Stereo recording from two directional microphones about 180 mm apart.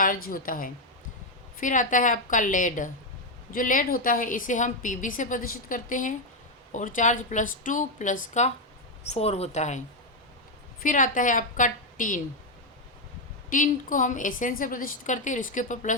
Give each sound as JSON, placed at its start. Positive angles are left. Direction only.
{"t": 0.0, "sound": "a woman's voice", "side_deg": 50}
{"t": 13.5, "sound": "a woman's voice", "side_deg": 45}